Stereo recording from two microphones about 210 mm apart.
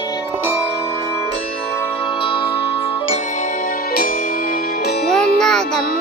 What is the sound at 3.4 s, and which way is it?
Music, 40° left (ahead or behind).